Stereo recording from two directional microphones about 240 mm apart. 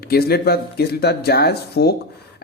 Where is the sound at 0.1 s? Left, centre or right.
Left.